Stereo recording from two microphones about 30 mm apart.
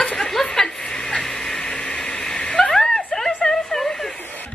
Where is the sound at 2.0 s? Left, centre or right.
Centre.